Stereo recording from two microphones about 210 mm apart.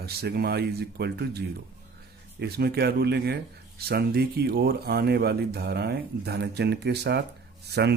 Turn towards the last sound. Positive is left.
turn(degrees=-50)  # may be behind; listen again after turning